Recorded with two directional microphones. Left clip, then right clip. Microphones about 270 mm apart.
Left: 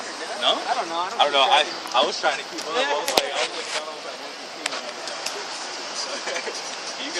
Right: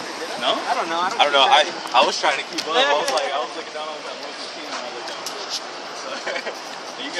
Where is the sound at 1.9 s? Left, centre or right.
Right.